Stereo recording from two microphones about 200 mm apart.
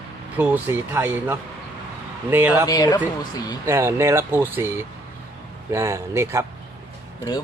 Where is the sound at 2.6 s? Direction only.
20° left (ahead or behind).